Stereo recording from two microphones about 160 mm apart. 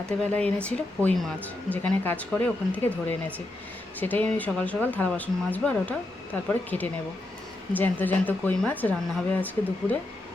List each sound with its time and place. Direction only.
0.0 s speech: 5° left (ahead or behind)